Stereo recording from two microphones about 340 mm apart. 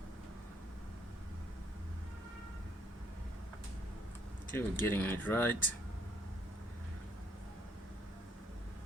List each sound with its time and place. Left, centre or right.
4.5 s speech: centre